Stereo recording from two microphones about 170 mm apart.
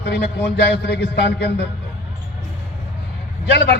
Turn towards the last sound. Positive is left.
turn(degrees=80)